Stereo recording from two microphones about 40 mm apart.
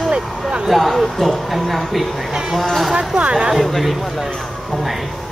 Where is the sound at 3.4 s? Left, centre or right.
Centre.